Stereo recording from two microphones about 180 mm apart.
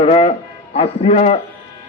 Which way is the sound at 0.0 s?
35° left (ahead or behind).